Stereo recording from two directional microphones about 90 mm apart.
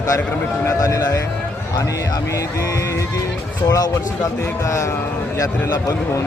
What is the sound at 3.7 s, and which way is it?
Speech, 45° left (ahead or behind).